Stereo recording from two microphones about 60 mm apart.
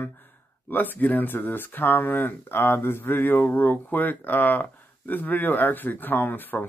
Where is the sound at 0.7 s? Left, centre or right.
Left.